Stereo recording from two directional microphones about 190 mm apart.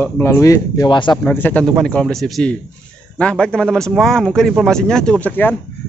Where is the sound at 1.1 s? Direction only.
10° left (ahead or behind).